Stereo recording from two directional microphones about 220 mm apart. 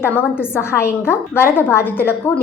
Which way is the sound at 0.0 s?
10° left (ahead or behind).